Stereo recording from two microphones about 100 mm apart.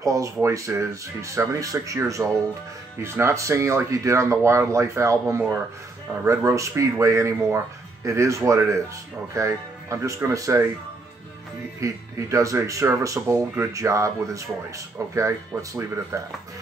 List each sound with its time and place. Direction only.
0.0 s speech: 35° right (ahead or behind)
11.8 s speech: 30° right (ahead or behind)